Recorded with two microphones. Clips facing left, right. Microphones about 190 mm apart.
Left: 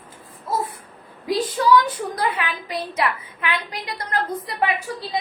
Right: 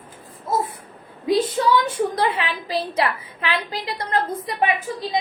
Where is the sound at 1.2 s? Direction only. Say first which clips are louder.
Right 2 dB; 25° right (ahead or behind).